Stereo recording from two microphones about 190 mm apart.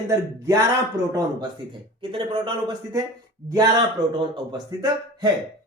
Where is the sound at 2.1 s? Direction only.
25° right (ahead or behind).